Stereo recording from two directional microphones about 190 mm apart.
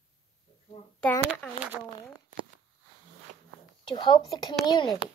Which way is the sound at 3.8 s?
25° left (ahead or behind).